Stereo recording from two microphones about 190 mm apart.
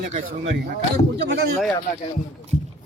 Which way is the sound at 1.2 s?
60° right (ahead or behind).